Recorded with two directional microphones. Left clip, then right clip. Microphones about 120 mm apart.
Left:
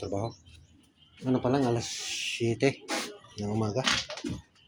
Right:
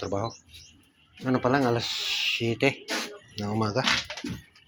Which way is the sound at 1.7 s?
20° left (ahead or behind).